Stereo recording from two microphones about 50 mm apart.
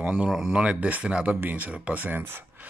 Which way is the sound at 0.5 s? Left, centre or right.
Right.